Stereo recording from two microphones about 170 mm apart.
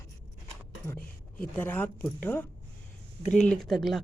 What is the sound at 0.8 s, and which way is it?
A woman's voice, 15° left (ahead or behind).